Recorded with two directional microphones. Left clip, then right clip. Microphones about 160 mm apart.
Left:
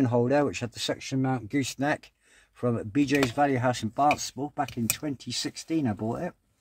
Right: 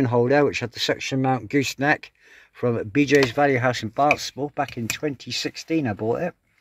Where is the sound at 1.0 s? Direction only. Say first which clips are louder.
Right 7 dB; 35° right (ahead or behind).